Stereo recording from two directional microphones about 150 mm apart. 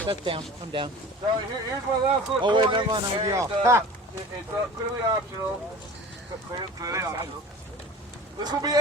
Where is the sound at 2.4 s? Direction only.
30° right (ahead or behind).